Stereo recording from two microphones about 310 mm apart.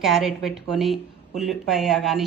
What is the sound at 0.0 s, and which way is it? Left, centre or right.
Speech, centre.